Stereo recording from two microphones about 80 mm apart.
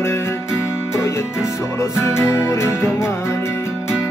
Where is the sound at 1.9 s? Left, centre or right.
Left.